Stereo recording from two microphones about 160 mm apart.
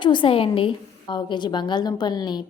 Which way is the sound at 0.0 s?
30° left (ahead or behind).